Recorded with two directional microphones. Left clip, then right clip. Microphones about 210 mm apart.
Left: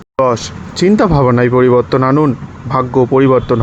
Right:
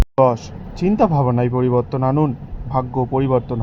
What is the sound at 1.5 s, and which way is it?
Speech, 60° left (ahead or behind).